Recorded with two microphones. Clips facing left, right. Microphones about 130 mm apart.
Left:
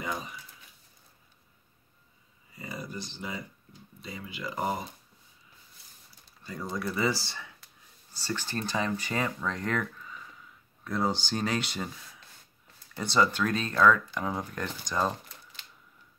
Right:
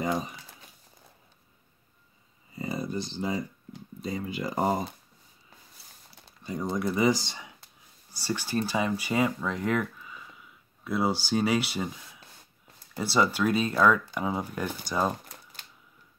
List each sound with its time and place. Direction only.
0.0 s crumpling: 35° right (ahead or behind)
2.5 s a sound: 30° right (ahead or behind)
4.0 s speech: 40° right (ahead or behind)
6.4 s speech: 25° right (ahead or behind)